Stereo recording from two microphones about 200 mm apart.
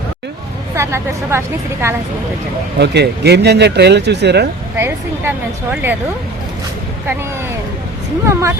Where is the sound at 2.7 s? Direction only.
55° right (ahead or behind).